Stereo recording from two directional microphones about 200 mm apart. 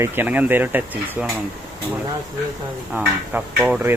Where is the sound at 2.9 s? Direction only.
5° right (ahead or behind).